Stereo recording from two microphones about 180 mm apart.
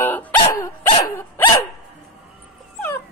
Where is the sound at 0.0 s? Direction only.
10° left (ahead or behind).